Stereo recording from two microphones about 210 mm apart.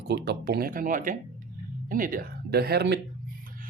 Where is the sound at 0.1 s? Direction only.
50° right (ahead or behind).